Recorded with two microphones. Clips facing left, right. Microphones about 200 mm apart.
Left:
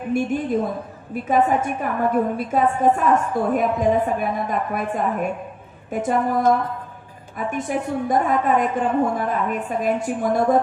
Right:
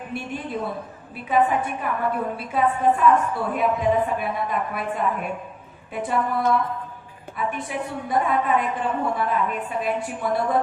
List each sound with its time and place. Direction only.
1.1 s a woman's voice: 45° left (ahead or behind)